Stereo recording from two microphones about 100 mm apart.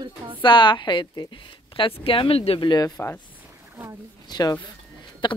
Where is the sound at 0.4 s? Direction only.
50° left (ahead or behind); by 2.6 s 75° left (ahead or behind).